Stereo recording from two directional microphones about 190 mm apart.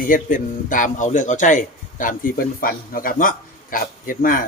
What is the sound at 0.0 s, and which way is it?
Speech, 45° left (ahead or behind).